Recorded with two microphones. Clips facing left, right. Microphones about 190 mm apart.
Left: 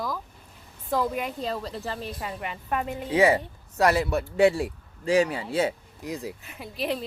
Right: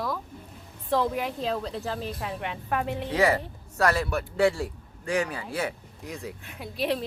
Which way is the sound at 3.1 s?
20° left (ahead or behind).